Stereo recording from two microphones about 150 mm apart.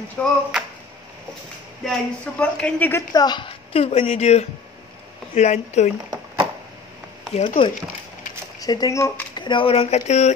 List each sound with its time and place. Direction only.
0.2 s speech: centre (ahead or behind)
1.9 s speech: 10° left (ahead or behind)
3.1 s a woman's voice: 25° left (ahead or behind); by 5.9 s 50° left (ahead or behind)
7.4 s a woman's voice: 35° left (ahead or behind)
8.5 s speech: 25° left (ahead or behind)
9.4 s a woman's voice: 35° left (ahead or behind)